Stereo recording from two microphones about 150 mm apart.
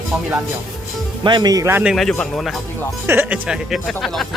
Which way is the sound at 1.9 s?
Centre (ahead or behind).